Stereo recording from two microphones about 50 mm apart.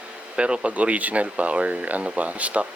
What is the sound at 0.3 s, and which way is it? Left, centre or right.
Speech, right.